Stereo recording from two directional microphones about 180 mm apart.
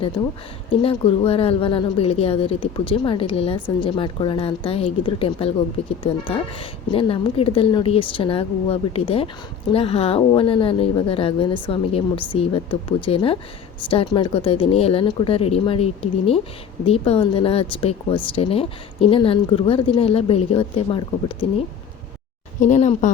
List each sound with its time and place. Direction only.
0.7 s a woman's voice: 30° left (ahead or behind)
22.6 s a woman's voice: 40° left (ahead or behind)